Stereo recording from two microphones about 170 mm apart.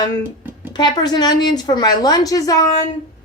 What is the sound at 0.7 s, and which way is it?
A woman's voice, 25° left (ahead or behind).